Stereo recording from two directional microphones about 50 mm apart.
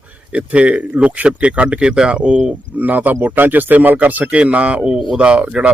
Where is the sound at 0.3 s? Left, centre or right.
Right.